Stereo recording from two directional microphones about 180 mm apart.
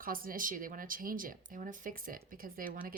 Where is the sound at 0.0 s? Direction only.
50° right (ahead or behind).